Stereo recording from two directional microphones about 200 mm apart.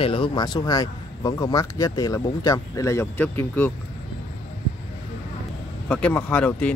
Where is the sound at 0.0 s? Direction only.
25° left (ahead or behind); by 3.7 s 10° left (ahead or behind).